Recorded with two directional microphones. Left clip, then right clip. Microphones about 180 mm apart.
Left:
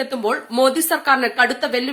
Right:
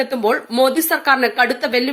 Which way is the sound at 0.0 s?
15° right (ahead or behind).